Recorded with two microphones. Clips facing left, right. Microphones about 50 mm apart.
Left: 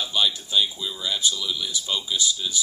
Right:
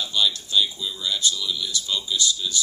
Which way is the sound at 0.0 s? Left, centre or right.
Centre.